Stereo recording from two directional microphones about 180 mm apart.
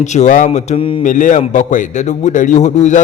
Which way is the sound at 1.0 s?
45° left (ahead or behind).